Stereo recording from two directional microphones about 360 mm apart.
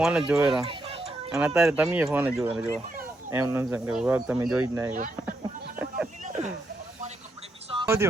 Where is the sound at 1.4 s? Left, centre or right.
Centre.